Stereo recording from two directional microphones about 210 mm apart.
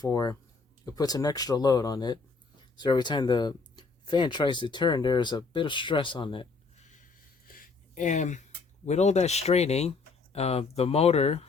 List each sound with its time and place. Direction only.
0.0 s speech: 20° left (ahead or behind)
7.4 s a sound: 40° left (ahead or behind)
8.9 s speech: 35° left (ahead or behind)